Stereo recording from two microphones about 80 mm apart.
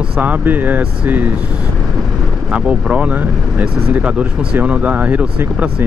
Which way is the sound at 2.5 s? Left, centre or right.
Centre.